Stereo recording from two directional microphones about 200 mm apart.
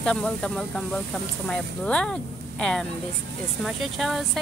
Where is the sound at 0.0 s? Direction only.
5° left (ahead or behind).